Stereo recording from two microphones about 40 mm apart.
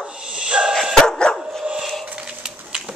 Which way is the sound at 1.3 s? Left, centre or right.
Left.